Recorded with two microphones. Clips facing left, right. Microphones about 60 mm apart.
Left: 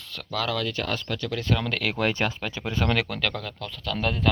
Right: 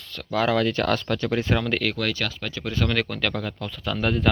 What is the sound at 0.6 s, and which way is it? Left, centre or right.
Speech, right.